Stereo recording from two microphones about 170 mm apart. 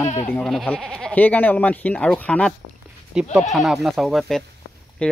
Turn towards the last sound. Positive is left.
turn(degrees=5)  # may be behind; listen again after turning